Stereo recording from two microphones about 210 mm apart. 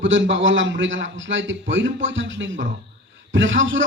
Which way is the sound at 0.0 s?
65° right (ahead or behind).